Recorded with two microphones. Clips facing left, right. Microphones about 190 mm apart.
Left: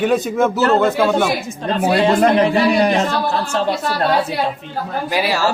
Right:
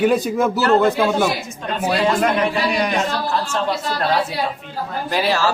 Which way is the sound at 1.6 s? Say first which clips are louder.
Left 4 dB; 30° left (ahead or behind).